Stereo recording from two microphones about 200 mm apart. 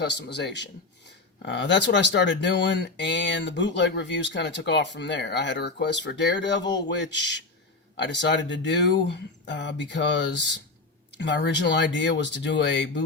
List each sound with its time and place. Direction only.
0.0 s speech: 60° left (ahead or behind)